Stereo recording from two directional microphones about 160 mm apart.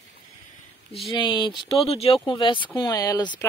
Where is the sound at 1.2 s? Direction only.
30° left (ahead or behind).